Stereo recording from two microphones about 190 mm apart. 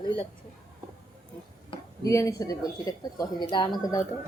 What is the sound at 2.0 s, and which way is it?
Speech, 15° left (ahead or behind).